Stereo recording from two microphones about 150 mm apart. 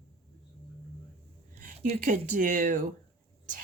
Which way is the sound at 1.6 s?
60° right (ahead or behind).